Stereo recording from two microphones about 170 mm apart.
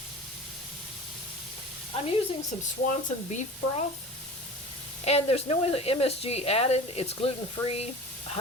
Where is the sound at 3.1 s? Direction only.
45° left (ahead or behind).